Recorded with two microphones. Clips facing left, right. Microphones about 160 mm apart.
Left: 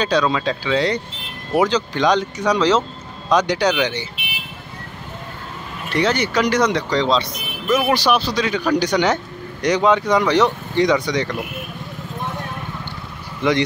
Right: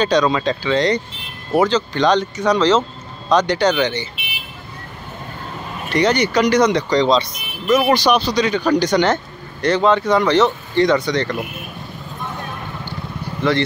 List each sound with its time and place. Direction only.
0.0 s speech: 5° left (ahead or behind)
5.9 s speech: 5° left (ahead or behind)
13.4 s speech: 15° left (ahead or behind)